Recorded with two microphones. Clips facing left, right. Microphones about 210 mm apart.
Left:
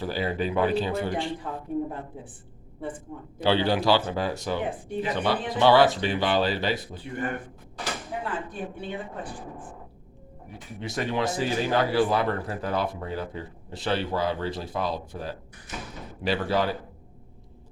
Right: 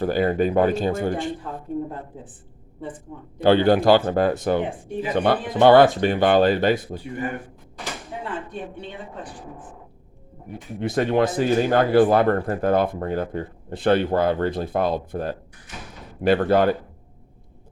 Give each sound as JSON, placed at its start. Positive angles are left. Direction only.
{"t": 0.0, "sound": "speech", "side_deg": -50}
{"t": 3.4, "sound": "speech", "side_deg": -50}
{"t": 7.0, "sound": "speech", "side_deg": -10}
{"t": 8.2, "sound": "speech", "side_deg": 5}
{"t": 10.5, "sound": "speech", "side_deg": -55}